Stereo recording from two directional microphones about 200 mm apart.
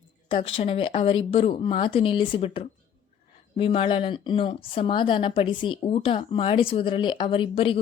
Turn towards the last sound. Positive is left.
turn(degrees=25)  # may be behind; listen again after turning